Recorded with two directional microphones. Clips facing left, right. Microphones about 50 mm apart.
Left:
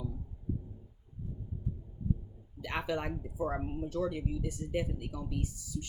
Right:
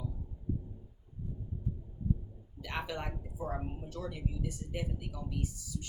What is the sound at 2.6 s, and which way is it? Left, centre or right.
Speech, left.